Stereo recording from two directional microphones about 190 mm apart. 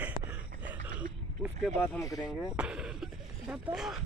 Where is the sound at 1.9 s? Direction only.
15° left (ahead or behind).